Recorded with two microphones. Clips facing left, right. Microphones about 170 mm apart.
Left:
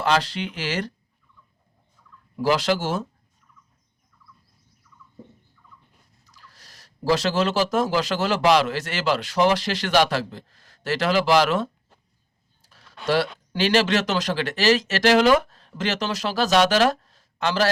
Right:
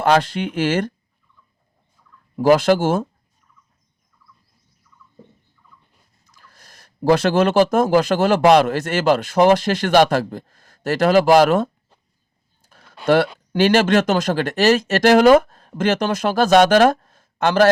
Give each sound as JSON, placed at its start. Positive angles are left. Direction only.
{"t": 0.0, "sound": "speech", "side_deg": -50}
{"t": 2.3, "sound": "speech", "side_deg": -50}
{"t": 6.3, "sound": "speech", "side_deg": -50}
{"t": 13.1, "sound": "speech", "side_deg": -55}